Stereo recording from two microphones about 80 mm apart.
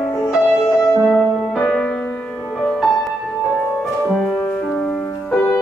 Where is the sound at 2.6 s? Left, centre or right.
Centre.